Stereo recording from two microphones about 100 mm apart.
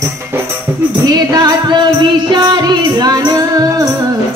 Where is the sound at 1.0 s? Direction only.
40° right (ahead or behind).